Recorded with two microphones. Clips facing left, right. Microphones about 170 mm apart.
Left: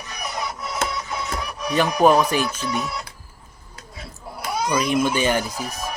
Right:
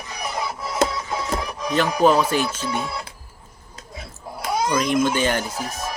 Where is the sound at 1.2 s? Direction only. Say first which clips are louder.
Right 2 dB; 25° right (ahead or behind).